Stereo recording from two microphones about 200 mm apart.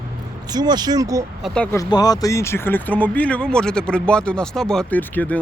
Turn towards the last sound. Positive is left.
turn(degrees=10)  # may be behind; listen again after turning